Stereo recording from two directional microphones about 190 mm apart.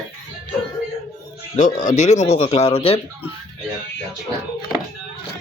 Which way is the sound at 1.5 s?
40° left (ahead or behind).